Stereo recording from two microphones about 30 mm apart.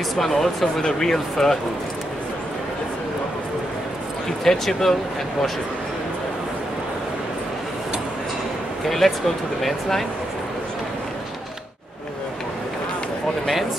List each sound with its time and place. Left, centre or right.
0.1 s speech: centre
0.8 s speech: left
4.5 s speech: centre
8.8 s speech: centre